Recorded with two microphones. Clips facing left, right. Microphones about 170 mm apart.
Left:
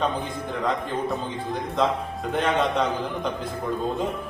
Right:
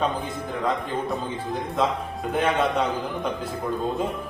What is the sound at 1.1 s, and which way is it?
A man's voice, centre (ahead or behind).